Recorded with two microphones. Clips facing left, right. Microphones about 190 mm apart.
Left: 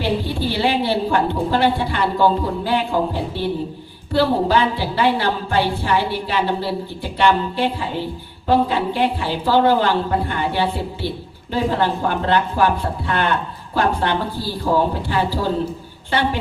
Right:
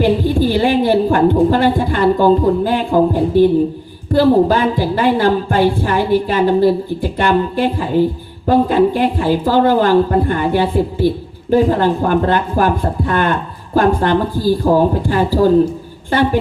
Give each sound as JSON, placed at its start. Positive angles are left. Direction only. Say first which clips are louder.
{"t": 0.0, "sound": "a woman's voice", "louder": "right 8 dB", "side_deg": -45}